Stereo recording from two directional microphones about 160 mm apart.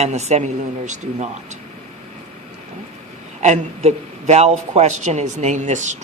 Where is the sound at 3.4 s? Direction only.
45° right (ahead or behind).